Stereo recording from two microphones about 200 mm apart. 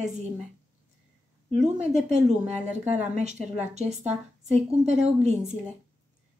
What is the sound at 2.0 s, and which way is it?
A woman's voice, 35° right (ahead or behind).